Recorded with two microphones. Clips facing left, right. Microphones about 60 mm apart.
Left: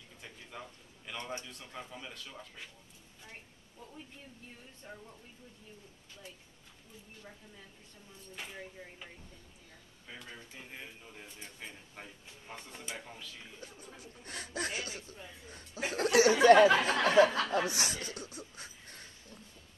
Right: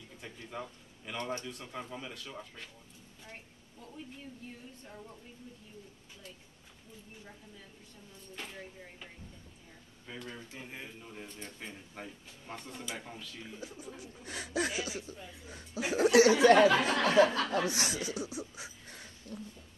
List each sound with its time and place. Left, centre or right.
0.2 s a man's voice: centre
8.4 s speech: centre
11.2 s speech: centre
11.6 s speech: centre
16.3 s speech: left
17.8 s a sound: centre